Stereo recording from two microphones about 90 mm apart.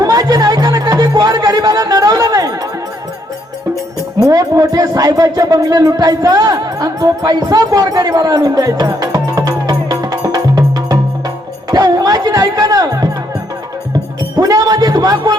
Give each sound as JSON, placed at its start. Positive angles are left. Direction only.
{"t": 0.0, "sound": "music", "side_deg": -40}
{"t": 4.2, "sound": "speech", "side_deg": -40}
{"t": 14.3, "sound": "a man's voice", "side_deg": -45}